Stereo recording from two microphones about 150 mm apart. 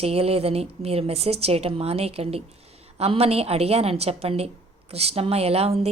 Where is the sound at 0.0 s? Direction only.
40° right (ahead or behind).